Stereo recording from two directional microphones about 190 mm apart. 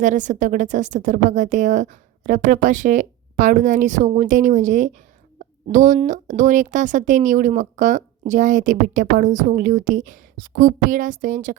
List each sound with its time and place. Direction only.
0.0 s speech: 40° right (ahead or behind)